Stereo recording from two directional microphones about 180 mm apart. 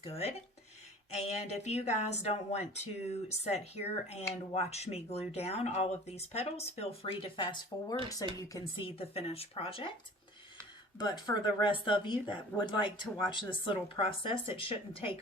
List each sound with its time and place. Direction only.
0.0 s speech: 35° left (ahead or behind)
8.9 s speech: 30° left (ahead or behind)
10.9 s speech: 25° left (ahead or behind)